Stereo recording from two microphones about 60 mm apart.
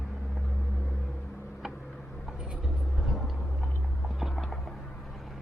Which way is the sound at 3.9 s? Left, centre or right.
Centre.